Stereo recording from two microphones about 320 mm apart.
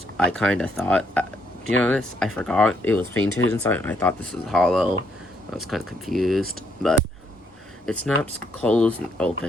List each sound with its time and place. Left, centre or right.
0.3 s speech: centre
3.2 s speech: left
3.5 s speech: centre
7.9 s speech: centre